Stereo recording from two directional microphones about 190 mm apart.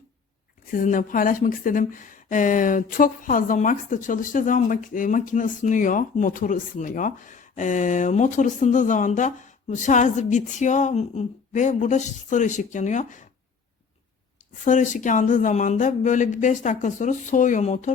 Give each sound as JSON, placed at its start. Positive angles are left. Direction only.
{"t": 0.7, "sound": "speech", "side_deg": 45}
{"t": 14.6, "sound": "speech", "side_deg": 40}